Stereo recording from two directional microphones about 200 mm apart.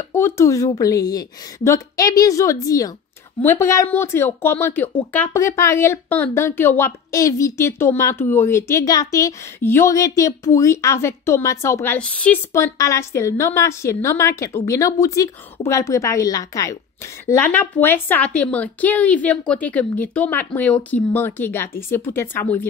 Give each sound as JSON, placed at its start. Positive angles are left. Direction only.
{"t": 0.1, "sound": "speech", "side_deg": 15}